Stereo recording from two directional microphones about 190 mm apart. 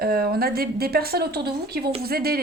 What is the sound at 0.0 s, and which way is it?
A woman's voice, 50° right (ahead or behind).